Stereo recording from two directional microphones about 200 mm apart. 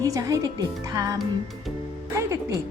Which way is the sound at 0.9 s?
15° right (ahead or behind).